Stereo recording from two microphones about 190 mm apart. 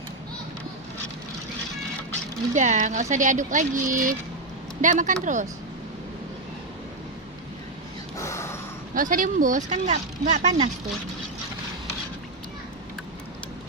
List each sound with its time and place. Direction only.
2.5 s speech: 40° right (ahead or behind)
8.1 s snort: 15° left (ahead or behind)
9.0 s speech: 45° right (ahead or behind)